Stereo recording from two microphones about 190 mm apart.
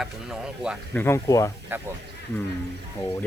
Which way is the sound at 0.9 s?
10° left (ahead or behind).